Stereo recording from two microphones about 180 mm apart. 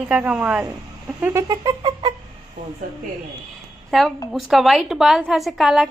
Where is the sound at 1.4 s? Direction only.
20° right (ahead or behind).